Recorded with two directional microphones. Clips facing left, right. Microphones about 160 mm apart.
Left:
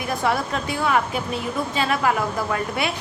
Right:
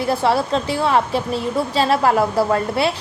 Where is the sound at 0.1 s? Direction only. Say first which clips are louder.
Right 5 dB; 30° right (ahead or behind).